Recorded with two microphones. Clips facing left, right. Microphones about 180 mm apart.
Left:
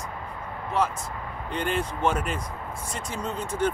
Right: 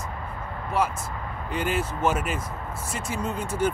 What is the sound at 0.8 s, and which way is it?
Speech, 10° right (ahead or behind).